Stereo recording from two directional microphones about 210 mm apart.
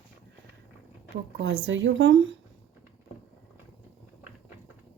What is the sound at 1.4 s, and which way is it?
Speech, 60° right (ahead or behind).